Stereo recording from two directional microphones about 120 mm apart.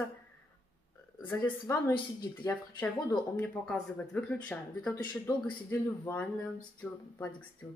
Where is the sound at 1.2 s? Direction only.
15° left (ahead or behind).